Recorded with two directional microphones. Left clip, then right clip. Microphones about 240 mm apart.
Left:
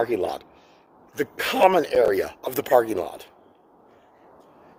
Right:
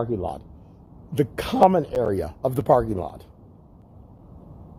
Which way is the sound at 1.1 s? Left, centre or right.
Centre.